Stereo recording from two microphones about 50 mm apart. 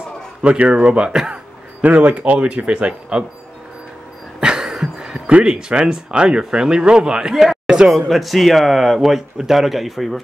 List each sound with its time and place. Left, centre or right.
0.4 s speech: right
1.3 s speech: right
4.4 s speech: centre
7.4 s a sound: centre
7.9 s speech: centre